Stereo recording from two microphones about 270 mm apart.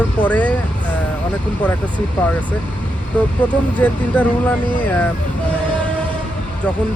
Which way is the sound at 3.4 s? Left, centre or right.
Centre.